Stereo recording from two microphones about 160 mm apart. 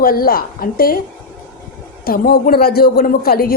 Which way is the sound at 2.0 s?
70° left (ahead or behind).